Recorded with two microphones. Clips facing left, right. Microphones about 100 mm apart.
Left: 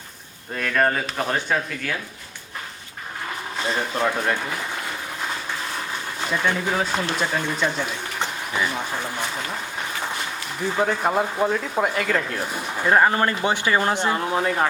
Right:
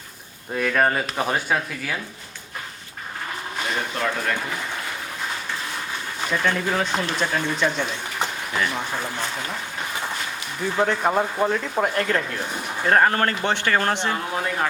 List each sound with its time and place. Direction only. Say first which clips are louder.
0.5 s speech: right 1 dB; 5° right (ahead or behind)
3.6 s speech: left 3 dB; 30° left (ahead or behind)
6.3 s speech: even; 10° left (ahead or behind)
10.8 s speech: right 1 dB; centre (ahead or behind)